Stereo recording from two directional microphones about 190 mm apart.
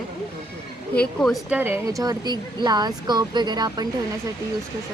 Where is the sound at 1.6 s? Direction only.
15° right (ahead or behind).